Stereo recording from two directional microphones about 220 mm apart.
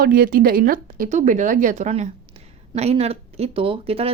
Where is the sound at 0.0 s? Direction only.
40° right (ahead or behind).